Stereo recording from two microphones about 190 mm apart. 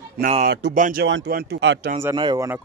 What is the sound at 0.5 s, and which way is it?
Speech, 65° right (ahead or behind).